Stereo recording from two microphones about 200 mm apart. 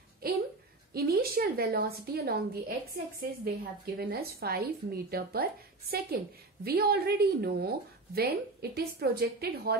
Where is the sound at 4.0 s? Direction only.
50° right (ahead or behind).